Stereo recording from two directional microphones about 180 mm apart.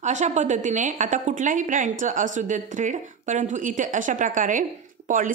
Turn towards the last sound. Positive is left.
turn(degrees=-45)  # may be behind; listen again after turning